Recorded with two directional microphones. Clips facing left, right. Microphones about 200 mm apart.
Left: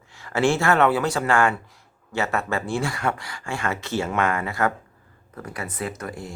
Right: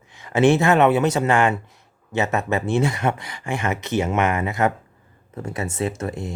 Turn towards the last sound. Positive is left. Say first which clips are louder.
# right 5 dB
turn(degrees=-25)  # may be behind; listen again after turning